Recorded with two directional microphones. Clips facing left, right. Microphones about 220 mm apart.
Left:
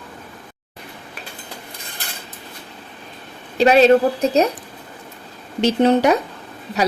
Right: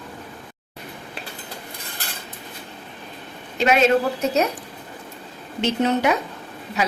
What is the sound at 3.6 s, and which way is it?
Speech, 35° left (ahead or behind).